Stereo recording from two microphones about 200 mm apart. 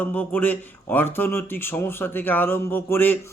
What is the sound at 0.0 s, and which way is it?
A man's voice, 10° left (ahead or behind).